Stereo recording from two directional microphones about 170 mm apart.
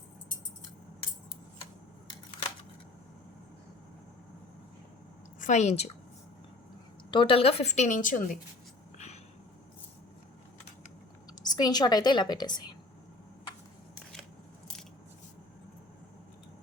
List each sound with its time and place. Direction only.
5.4 s a woman's voice: 45° left (ahead or behind)
7.1 s a woman's voice: 30° left (ahead or behind); by 8.4 s 50° left (ahead or behind)
11.4 s a woman's voice: 25° left (ahead or behind)